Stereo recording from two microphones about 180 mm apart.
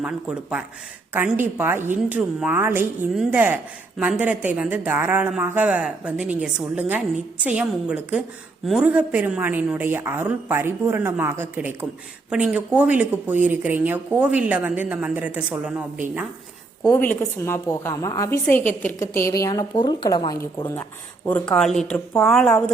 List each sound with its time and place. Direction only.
0.0 s speech: 5° right (ahead or behind)
16.8 s a woman's voice: 10° left (ahead or behind)
21.5 s speech: 5° left (ahead or behind)